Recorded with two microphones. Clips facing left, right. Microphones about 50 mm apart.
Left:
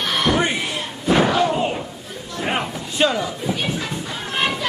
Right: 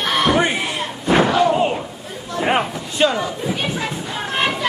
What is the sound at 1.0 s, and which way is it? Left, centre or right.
Slam, centre.